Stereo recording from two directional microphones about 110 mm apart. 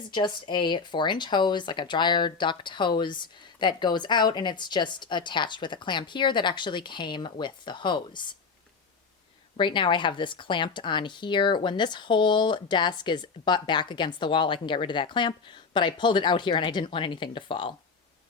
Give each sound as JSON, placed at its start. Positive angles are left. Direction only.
{"t": 0.1, "sound": "speech", "side_deg": 45}
{"t": 9.6, "sound": "speech", "side_deg": 45}